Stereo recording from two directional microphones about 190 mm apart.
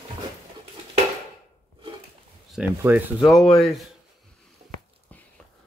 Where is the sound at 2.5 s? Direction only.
10° right (ahead or behind).